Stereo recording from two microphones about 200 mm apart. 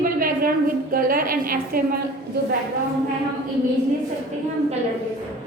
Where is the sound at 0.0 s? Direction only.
45° right (ahead or behind).